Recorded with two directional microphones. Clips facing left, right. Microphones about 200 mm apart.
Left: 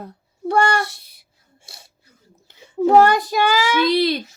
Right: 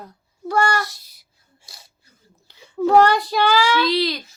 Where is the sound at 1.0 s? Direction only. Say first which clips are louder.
Left 2 dB; 60° left (ahead or behind).